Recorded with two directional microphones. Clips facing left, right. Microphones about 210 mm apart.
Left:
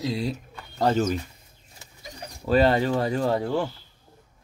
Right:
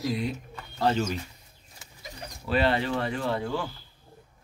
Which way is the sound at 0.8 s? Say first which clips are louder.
Left 4 dB; 45° left (ahead or behind).